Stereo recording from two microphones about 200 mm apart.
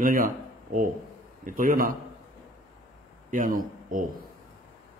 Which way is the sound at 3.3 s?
45° right (ahead or behind).